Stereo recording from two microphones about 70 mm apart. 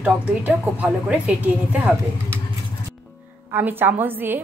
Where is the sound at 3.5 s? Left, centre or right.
Right.